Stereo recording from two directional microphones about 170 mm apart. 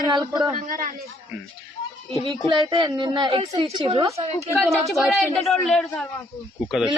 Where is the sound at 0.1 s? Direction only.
25° right (ahead or behind).